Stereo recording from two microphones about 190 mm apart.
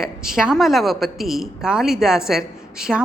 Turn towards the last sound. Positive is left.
turn(degrees=-5)  # may be behind; listen again after turning